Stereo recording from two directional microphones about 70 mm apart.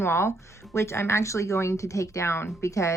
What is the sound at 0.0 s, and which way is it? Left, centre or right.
Speech, left.